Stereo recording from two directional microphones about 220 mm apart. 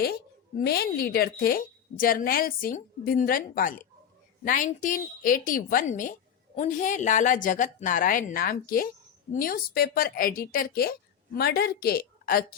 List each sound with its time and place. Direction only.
0.0 s a woman's voice: 45° left (ahead or behind)